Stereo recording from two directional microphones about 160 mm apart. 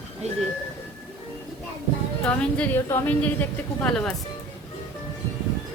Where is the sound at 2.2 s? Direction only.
10° left (ahead or behind).